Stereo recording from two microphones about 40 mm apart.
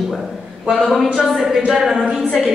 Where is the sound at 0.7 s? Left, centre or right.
Centre.